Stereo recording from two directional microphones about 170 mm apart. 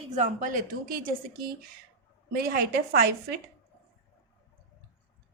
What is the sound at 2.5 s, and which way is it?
Speech, 65° right (ahead or behind).